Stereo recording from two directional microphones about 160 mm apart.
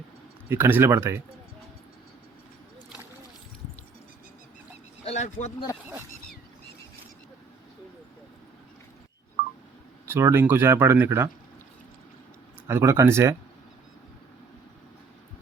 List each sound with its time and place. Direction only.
0.4 s speech: 15° right (ahead or behind)
5.0 s a sound: 45° left (ahead or behind)
10.1 s speech: 15° right (ahead or behind)
12.6 s speech: 15° right (ahead or behind)